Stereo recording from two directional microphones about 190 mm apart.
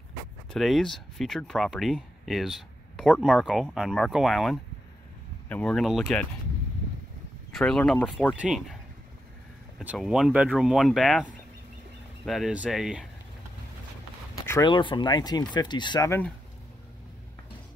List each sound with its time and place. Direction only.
0.5 s speech: centre (ahead or behind)
7.5 s speech: 5° left (ahead or behind)
9.8 s speech: centre (ahead or behind)
12.3 s speech: centre (ahead or behind)
14.4 s a sound: 15° left (ahead or behind)
14.7 s speech: 25° left (ahead or behind)